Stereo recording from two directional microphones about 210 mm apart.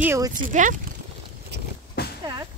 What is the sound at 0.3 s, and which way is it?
Speech, 40° right (ahead or behind).